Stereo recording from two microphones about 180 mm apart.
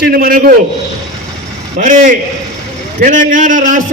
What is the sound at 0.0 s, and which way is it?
Speech, 55° right (ahead or behind).